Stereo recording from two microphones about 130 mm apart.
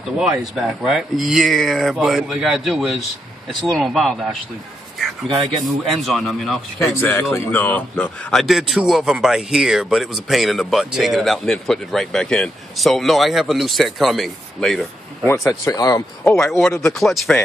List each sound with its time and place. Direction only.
0.2 s a man's voice: 5° right (ahead or behind)
5.9 s a man's voice: centre (ahead or behind)
6.8 s a man's voice: 20° left (ahead or behind); by 14.9 s centre (ahead or behind)
15.6 s speech: 30° left (ahead or behind)
16.3 s a man's voice: 5° left (ahead or behind)